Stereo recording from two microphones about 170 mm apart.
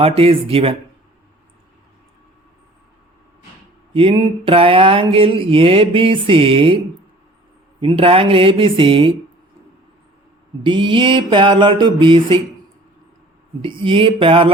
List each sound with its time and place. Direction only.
0.2 s mantra: 35° right (ahead or behind)
3.9 s mantra: 30° right (ahead or behind)
10.6 s mantra: 30° right (ahead or behind)
13.6 s mantra: 30° right (ahead or behind)